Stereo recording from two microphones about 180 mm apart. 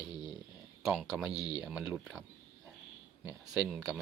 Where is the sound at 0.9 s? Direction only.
Centre (ahead or behind).